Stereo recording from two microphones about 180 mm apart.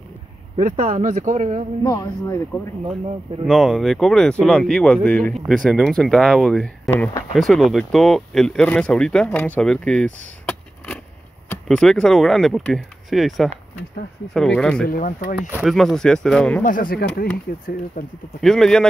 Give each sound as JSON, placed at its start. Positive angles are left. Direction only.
{"t": 0.6, "sound": "speech", "side_deg": -50}
{"t": 1.9, "sound": "speech", "side_deg": 15}
{"t": 3.4, "sound": "speech", "side_deg": 0}
{"t": 14.9, "sound": "speech", "side_deg": 50}
{"t": 15.5, "sound": "speech", "side_deg": 0}
{"t": 16.6, "sound": "speech", "side_deg": 50}
{"t": 17.0, "sound": "speech", "side_deg": 70}
{"t": 18.0, "sound": "speech", "side_deg": 60}
{"t": 18.4, "sound": "speech", "side_deg": 0}